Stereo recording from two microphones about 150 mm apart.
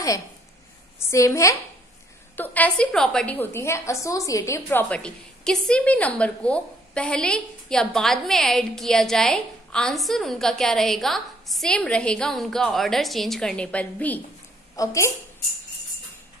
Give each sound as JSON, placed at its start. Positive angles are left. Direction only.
{"t": 0.9, "sound": "a woman's voice", "side_deg": 20}
{"t": 14.8, "sound": "a woman's voice", "side_deg": 20}